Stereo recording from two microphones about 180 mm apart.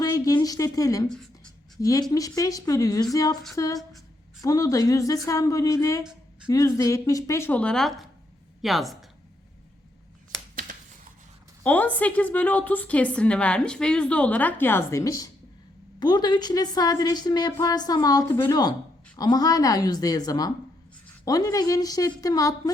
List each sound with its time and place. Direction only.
0.0 s a woman's voice: 20° left (ahead or behind)
1.1 s writing: 5° left (ahead or behind)
1.8 s a woman's voice: 20° left (ahead or behind); by 9.0 s centre (ahead or behind)
10.5 s a sound: 50° right (ahead or behind)
11.6 s a woman's voice: 10° left (ahead or behind)